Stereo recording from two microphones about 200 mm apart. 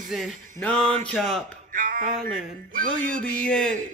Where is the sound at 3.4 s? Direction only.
5° left (ahead or behind).